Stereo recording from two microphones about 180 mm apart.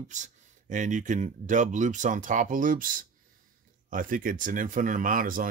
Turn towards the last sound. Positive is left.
turn(degrees=-50)  # may be behind; listen again after turning